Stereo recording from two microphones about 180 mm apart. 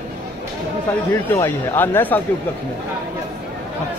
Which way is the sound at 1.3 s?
10° left (ahead or behind).